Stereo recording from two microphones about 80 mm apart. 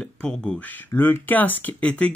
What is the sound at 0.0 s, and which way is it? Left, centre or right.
Speech, centre.